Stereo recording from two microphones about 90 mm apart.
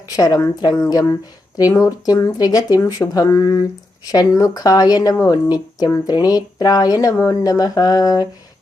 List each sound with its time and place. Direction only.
0.2 s speech: 40° left (ahead or behind)